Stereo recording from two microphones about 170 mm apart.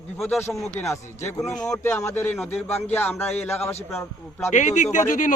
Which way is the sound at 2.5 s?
40° left (ahead or behind).